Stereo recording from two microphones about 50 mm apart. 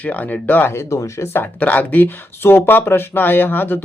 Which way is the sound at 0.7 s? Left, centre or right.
Left.